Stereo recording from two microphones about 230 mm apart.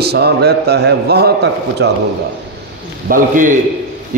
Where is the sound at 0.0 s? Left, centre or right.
Right.